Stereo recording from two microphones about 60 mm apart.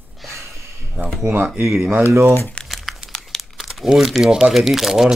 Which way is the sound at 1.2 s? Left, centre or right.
Right.